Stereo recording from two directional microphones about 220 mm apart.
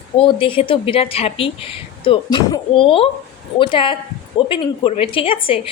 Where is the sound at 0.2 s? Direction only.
25° left (ahead or behind).